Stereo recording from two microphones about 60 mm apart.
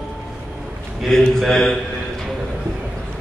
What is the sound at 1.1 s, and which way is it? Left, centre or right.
Speech, centre.